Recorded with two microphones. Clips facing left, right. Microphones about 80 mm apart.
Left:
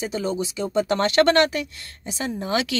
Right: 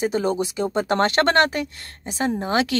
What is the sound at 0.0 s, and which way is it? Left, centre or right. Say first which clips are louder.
Speech: right 4 dB; right.